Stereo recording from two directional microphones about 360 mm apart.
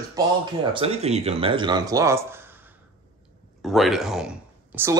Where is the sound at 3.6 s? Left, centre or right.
Centre.